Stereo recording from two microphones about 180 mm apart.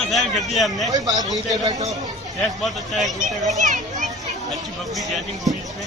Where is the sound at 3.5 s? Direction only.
45° right (ahead or behind).